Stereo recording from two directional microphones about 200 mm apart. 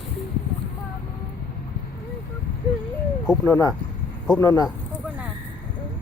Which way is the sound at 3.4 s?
10° left (ahead or behind).